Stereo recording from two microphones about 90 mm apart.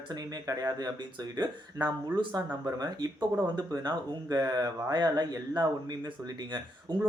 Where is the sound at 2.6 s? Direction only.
50° right (ahead or behind).